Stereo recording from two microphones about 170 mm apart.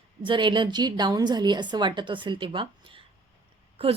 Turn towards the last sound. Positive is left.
turn(degrees=-35)  # may be behind; listen again after turning